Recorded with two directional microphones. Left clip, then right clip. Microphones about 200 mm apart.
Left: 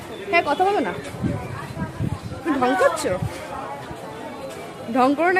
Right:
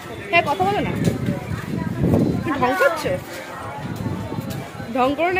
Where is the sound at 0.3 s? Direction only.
25° left (ahead or behind).